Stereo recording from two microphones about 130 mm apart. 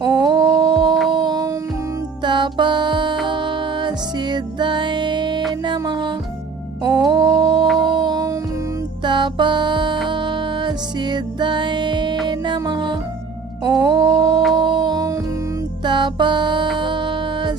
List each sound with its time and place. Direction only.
0.0 s humming: 30° right (ahead or behind)
1.1 s a sound: 35° right (ahead or behind)
2.2 s music: 35° right (ahead or behind)
7.8 s a sound: 35° right (ahead or behind)
9.0 s music: 35° right (ahead or behind)
13.7 s mantra: 30° right (ahead or behind)
14.5 s music: 35° right (ahead or behind)